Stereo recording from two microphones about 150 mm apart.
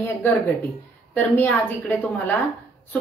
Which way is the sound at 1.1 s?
10° left (ahead or behind).